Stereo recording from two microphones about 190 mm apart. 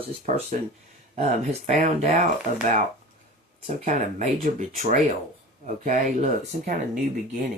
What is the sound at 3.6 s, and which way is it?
Speech, 40° right (ahead or behind).